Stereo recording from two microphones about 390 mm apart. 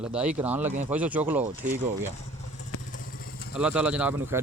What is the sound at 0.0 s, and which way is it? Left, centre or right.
Speech, centre.